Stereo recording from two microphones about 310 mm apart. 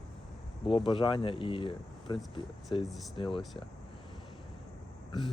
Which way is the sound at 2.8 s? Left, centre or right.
Centre.